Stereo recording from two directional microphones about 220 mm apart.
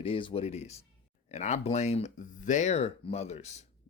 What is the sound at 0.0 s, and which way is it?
Speech, 25° left (ahead or behind).